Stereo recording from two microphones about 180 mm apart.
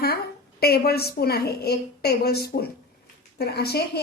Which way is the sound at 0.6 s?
60° left (ahead or behind).